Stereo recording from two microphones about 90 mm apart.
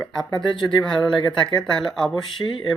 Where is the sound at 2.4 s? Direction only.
25° left (ahead or behind).